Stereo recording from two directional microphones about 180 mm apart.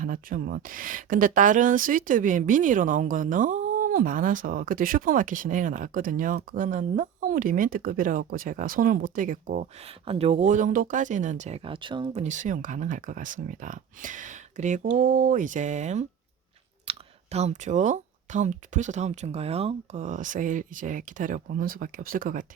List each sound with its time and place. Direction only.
0.0 s speech: 50° right (ahead or behind)
10.1 s speech: 35° right (ahead or behind)
12.2 s speech: 45° right (ahead or behind)